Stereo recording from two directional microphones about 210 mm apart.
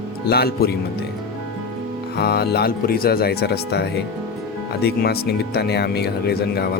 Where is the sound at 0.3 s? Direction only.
50° left (ahead or behind).